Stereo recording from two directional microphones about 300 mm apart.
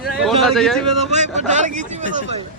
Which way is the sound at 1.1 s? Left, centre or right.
Right.